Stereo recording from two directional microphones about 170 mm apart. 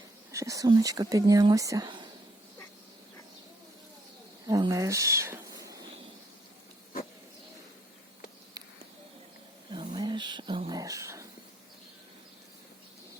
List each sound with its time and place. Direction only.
0.3 s speech: 20° right (ahead or behind)
4.4 s speech: 20° right (ahead or behind)
9.9 s a sound: 25° right (ahead or behind)